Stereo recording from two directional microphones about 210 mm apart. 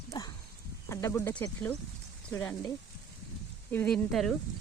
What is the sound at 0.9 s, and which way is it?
Speech, 15° left (ahead or behind).